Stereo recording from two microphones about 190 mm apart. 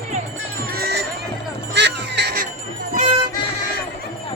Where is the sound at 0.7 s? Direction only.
55° right (ahead or behind).